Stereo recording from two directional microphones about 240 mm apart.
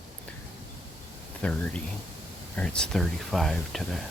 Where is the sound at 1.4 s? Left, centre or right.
Centre.